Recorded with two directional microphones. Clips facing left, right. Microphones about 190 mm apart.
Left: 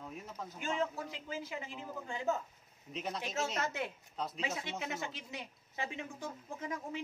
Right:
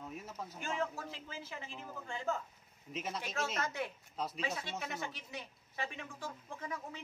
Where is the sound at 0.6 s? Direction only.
15° left (ahead or behind).